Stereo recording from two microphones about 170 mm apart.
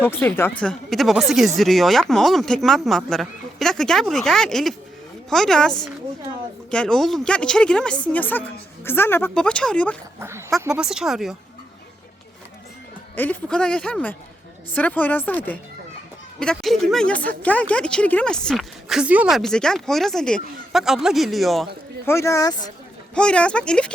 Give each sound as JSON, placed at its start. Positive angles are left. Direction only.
{"t": 0.0, "sound": "a woman's voice", "side_deg": 10}
{"t": 10.2, "sound": "speech", "side_deg": -15}
{"t": 10.8, "sound": "a woman's voice", "side_deg": -5}
{"t": 13.1, "sound": "a woman's voice", "side_deg": 10}
{"t": 22.0, "sound": "speech", "side_deg": 15}
{"t": 23.1, "sound": "a woman's voice", "side_deg": 5}